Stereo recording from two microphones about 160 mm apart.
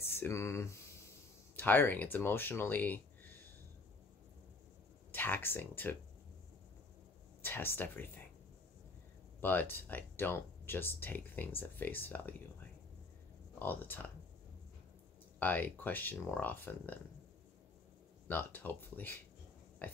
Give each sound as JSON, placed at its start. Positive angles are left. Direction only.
{"t": 0.0, "sound": "speech", "side_deg": 15}
{"t": 5.1, "sound": "speech", "side_deg": 10}
{"t": 7.4, "sound": "speech", "side_deg": 15}
{"t": 9.4, "sound": "speech", "side_deg": 10}
{"t": 13.6, "sound": "speech", "side_deg": 10}
{"t": 15.3, "sound": "speech", "side_deg": 10}
{"t": 18.3, "sound": "speech", "side_deg": 10}